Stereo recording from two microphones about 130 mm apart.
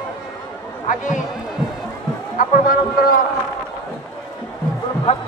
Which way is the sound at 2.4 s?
90° left.